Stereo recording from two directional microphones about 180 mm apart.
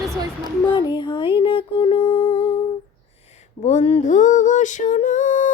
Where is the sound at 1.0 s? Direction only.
25° left (ahead or behind).